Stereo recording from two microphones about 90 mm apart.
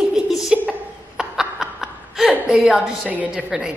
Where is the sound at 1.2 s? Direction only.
5° right (ahead or behind).